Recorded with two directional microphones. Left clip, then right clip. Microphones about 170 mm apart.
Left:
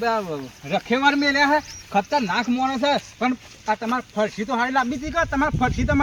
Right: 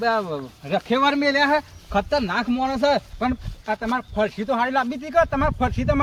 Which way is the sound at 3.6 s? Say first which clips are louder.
Left 1 dB; 30° right (ahead or behind).